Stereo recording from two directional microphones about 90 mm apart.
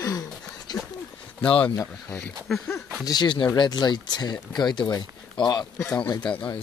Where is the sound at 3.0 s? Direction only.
50° left (ahead or behind).